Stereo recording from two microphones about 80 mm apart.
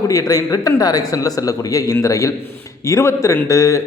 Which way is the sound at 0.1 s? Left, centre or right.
Left.